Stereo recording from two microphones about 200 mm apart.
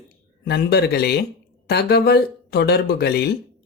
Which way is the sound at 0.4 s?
55° left (ahead or behind).